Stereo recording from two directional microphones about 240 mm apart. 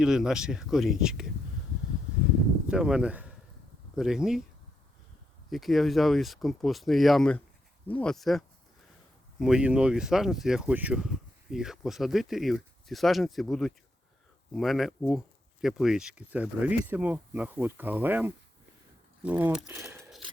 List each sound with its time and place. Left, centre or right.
0.0 s speech: centre
2.6 s speech: centre
5.5 s speech: centre